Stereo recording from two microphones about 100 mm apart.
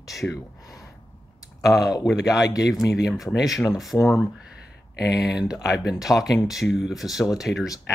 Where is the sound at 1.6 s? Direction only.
35° left (ahead or behind).